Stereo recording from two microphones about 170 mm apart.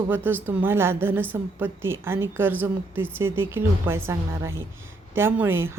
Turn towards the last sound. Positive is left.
turn(degrees=-15)  # may be behind; listen again after turning